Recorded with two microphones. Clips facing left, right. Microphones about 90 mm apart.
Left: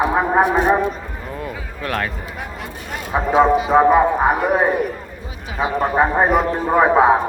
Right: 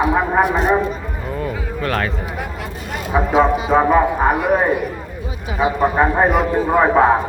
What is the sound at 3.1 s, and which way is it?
Speech, 20° left (ahead or behind).